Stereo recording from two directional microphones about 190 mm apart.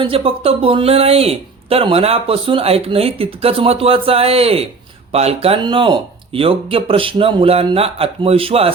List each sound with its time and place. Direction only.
0.0 s speech: 30° right (ahead or behind)